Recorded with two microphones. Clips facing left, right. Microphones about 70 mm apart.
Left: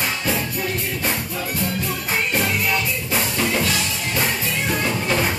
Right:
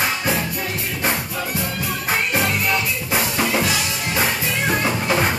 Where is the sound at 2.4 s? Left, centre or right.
Centre.